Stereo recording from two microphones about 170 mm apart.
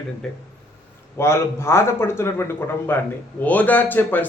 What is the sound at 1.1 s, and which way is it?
A man's voice, 15° left (ahead or behind).